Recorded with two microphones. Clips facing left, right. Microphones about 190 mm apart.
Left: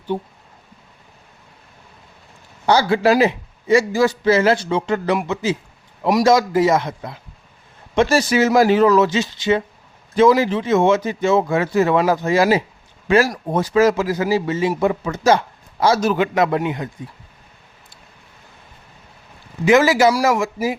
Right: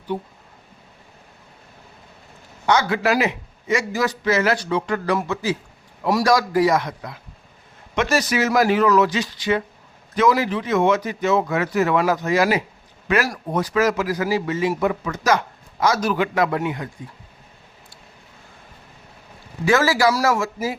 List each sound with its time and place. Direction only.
2.6 s a man's voice: 30° left (ahead or behind)
19.6 s a man's voice: 20° left (ahead or behind)